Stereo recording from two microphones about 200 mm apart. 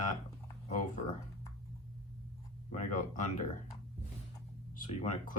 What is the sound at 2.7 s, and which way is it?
Speech, 40° left (ahead or behind).